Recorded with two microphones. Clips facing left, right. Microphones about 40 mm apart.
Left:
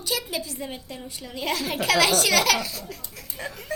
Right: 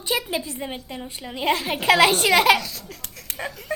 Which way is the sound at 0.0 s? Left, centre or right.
Right.